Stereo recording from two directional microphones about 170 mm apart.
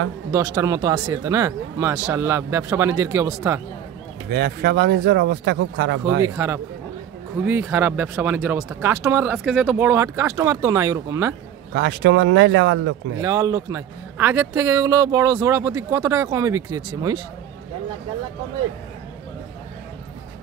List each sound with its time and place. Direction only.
0.3 s a man's voice: 20° right (ahead or behind)
4.3 s speech: 80° right
6.2 s speech: 15° right (ahead or behind)
11.7 s speech: 90° right
13.2 s a man's voice: 20° right (ahead or behind)